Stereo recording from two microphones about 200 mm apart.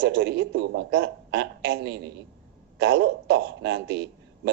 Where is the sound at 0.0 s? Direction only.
60° right (ahead or behind).